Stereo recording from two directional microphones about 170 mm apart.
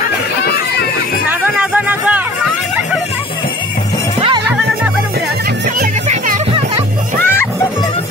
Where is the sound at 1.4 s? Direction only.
10° right (ahead or behind).